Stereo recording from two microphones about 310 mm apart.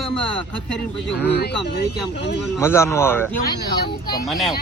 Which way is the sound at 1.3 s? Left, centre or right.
Left.